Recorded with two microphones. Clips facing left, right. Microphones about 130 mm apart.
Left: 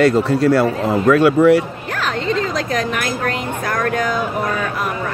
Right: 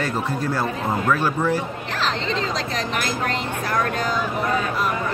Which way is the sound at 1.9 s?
50° left (ahead or behind).